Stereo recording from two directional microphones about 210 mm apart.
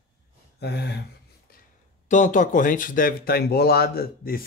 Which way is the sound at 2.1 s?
35° left (ahead or behind).